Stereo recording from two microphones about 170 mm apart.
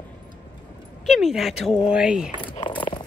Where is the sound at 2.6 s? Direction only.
30° left (ahead or behind).